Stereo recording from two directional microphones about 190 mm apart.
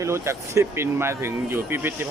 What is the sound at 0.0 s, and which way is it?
Speech, 15° right (ahead or behind).